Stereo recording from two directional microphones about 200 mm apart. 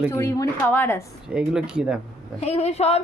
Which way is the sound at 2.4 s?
30° left (ahead or behind).